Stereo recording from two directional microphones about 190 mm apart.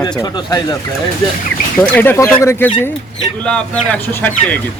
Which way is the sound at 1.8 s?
10° left (ahead or behind).